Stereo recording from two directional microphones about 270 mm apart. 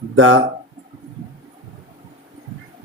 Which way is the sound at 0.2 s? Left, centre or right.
Right.